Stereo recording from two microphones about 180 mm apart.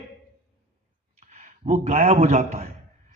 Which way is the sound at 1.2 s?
40° right (ahead or behind).